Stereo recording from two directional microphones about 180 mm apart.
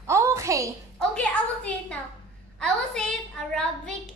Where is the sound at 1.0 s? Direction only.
5° left (ahead or behind).